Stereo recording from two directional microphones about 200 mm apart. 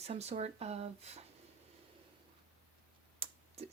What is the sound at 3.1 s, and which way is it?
Computer keyboard, 25° right (ahead or behind).